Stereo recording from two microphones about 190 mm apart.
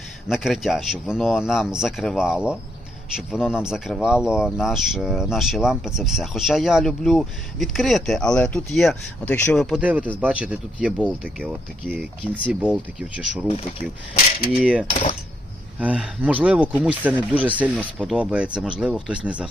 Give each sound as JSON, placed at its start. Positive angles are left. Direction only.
{"t": 0.3, "sound": "speech", "side_deg": 0}
{"t": 13.5, "sound": "speech", "side_deg": 35}
{"t": 14.5, "sound": "speech", "side_deg": -5}
{"t": 14.8, "sound": "speech", "side_deg": 35}
{"t": 15.8, "sound": "speech", "side_deg": -5}